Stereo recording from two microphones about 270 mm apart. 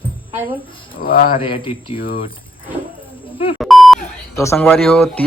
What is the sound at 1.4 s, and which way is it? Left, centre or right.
Speech, centre.